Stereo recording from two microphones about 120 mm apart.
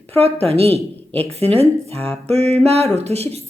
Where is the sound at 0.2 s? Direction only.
55° right (ahead or behind).